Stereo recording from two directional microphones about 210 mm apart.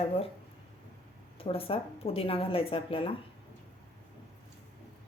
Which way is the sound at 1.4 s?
25° left (ahead or behind).